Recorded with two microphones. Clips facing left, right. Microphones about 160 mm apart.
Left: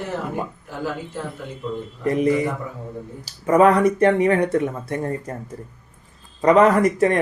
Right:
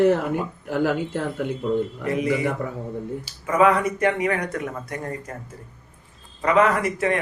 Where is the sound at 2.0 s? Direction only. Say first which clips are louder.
Left 3 dB; 40° left (ahead or behind).